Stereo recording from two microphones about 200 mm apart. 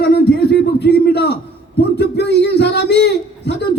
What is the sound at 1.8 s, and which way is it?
A man's voice, 55° left (ahead or behind).